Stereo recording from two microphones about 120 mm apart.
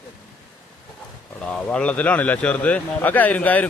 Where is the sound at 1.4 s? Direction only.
10° left (ahead or behind).